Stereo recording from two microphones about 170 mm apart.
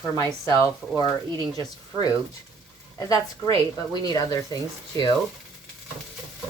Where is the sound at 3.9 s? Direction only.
25° left (ahead or behind).